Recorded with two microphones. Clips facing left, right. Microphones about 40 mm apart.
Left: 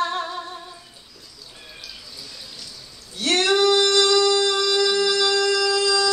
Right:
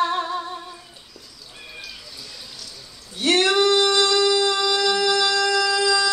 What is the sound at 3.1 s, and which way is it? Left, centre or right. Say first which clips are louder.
Singing: right 1 dB; centre.